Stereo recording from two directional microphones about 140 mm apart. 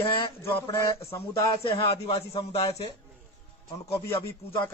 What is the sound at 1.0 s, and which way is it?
Speech, 45° left (ahead or behind).